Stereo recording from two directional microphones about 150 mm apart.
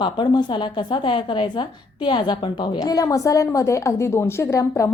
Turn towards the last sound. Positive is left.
turn(degrees=20)  # may be behind; listen again after turning